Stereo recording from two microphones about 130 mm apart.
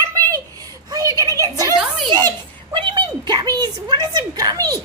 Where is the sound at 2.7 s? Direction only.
40° right (ahead or behind).